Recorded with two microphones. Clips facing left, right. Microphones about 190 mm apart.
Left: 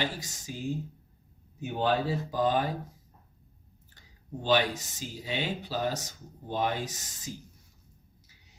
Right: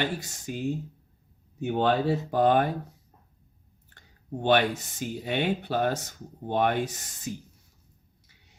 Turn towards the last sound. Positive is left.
turn(degrees=-60)  # may be behind; listen again after turning